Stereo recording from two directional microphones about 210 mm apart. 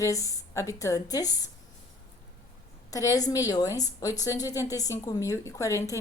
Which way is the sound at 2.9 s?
15° left (ahead or behind).